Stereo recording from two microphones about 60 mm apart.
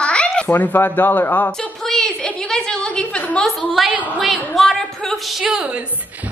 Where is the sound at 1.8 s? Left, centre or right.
Centre.